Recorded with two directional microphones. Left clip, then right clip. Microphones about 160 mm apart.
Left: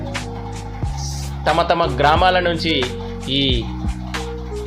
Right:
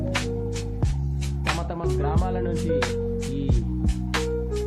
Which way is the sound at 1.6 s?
20° left (ahead or behind).